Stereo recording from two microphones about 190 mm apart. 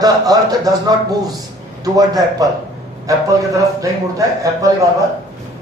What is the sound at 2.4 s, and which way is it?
Speech, 20° right (ahead or behind).